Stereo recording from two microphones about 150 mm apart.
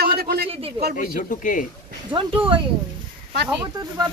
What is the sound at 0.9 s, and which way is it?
Speech, 60° left (ahead or behind).